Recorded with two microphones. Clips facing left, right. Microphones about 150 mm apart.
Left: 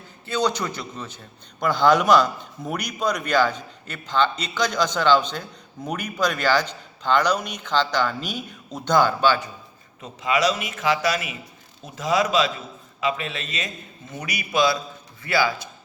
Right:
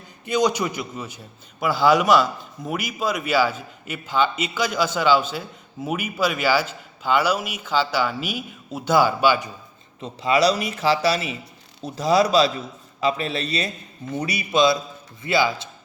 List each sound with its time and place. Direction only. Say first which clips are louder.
0.3 s a man's voice: right 3 dB; 15° right (ahead or behind)
10.0 s a man's voice: right 3 dB; 30° right (ahead or behind)